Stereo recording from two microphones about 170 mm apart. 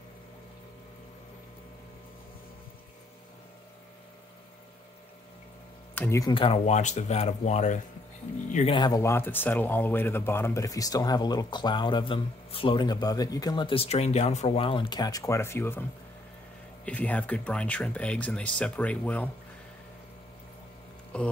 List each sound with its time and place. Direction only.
5.9 s speech: 15° left (ahead or behind)
6.3 s speech: 35° left (ahead or behind)
8.5 s speech: 30° left (ahead or behind); by 15.8 s 15° left (ahead or behind)
16.8 s speech: 10° left (ahead or behind)
21.1 s speech: 5° left (ahead or behind)